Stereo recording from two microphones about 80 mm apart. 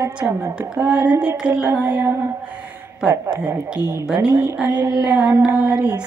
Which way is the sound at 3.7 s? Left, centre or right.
Centre.